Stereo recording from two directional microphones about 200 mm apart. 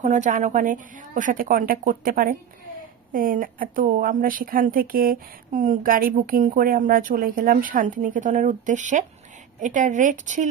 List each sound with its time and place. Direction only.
0.0 s a woman's voice: 40° right (ahead or behind)